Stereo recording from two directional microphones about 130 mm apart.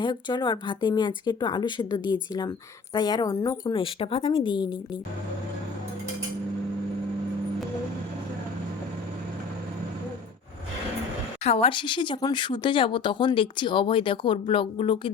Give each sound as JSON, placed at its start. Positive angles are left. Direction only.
{"t": 0.0, "sound": "speech", "side_deg": 35}
{"t": 11.4, "sound": "speech", "side_deg": 50}